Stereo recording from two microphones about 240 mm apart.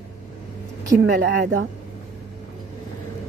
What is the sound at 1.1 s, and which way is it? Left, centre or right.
Speech, right.